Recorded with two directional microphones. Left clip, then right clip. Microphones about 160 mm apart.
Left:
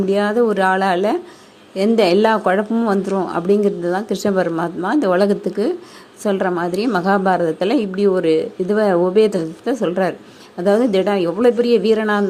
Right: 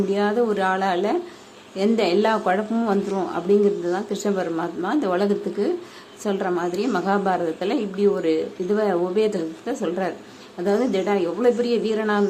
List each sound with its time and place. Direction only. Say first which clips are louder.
0.1 s a woman's voice: left 7 dB; 35° left (ahead or behind)